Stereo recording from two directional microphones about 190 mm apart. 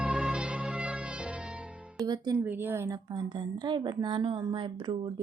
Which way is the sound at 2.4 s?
10° right (ahead or behind).